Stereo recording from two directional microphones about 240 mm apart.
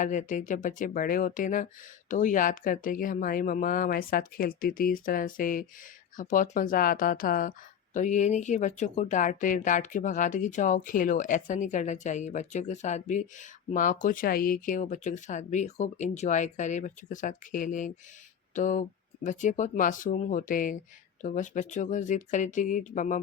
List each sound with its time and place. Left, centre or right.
0.0 s speech: left